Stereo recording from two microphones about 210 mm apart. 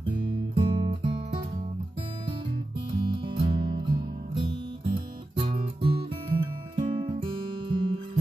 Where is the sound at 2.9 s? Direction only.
25° right (ahead or behind).